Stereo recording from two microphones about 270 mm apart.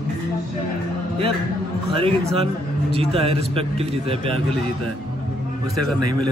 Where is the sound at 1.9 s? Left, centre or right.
Right.